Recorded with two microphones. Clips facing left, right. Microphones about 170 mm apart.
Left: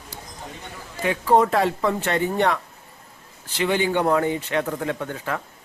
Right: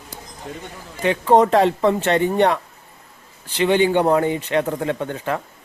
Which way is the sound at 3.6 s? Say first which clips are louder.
Right 5 dB; 15° right (ahead or behind).